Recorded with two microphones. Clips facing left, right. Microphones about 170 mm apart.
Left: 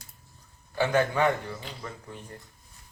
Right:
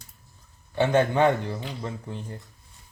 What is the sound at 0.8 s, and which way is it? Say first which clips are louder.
Speech: right 4 dB; 25° right (ahead or behind).